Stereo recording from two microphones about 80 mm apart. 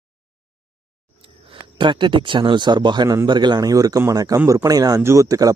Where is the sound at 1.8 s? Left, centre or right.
Right.